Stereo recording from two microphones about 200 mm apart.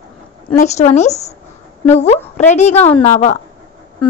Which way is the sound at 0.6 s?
35° left (ahead or behind).